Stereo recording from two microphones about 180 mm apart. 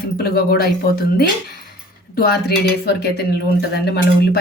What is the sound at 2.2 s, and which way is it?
Speech, 60° left (ahead or behind).